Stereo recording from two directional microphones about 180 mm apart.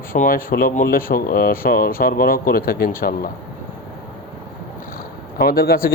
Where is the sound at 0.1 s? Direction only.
50° left (ahead or behind).